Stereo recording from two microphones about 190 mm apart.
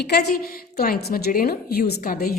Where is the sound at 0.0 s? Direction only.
60° left (ahead or behind).